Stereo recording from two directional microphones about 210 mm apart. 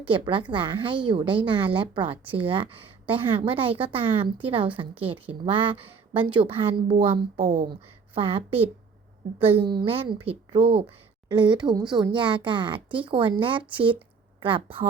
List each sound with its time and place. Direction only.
0.0 s speech: 25° right (ahead or behind)
7.3 s a woman's voice: 40° right (ahead or behind)
7.7 s a woman's voice: 25° right (ahead or behind)